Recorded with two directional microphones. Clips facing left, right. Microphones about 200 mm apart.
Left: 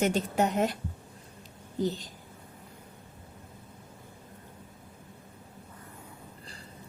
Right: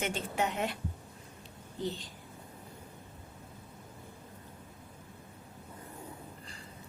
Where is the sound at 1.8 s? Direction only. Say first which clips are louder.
Left 6 dB; 40° left (ahead or behind).